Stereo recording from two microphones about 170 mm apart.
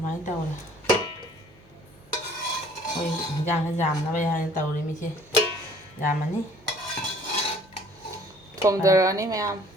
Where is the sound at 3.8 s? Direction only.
45° left (ahead or behind).